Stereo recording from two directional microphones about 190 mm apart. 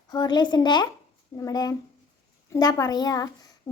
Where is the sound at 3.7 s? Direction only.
20° left (ahead or behind).